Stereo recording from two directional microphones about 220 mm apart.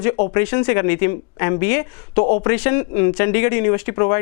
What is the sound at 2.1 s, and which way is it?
Speech, 30° left (ahead or behind).